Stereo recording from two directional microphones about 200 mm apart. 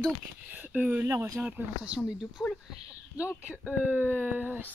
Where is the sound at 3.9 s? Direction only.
10° right (ahead or behind).